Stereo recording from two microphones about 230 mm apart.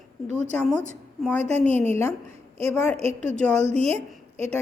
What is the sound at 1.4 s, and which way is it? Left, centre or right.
Speech, right.